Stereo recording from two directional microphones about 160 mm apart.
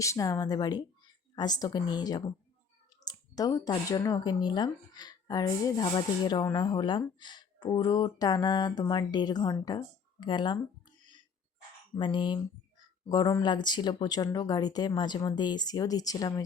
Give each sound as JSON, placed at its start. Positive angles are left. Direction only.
{"t": 0.0, "sound": "speech", "side_deg": 20}
{"t": 11.9, "sound": "speech", "side_deg": 30}